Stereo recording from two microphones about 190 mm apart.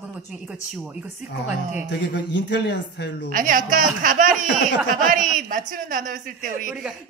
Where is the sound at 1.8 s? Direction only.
65° left (ahead or behind).